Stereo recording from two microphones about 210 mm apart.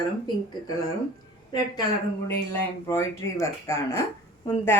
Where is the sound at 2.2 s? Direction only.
10° left (ahead or behind).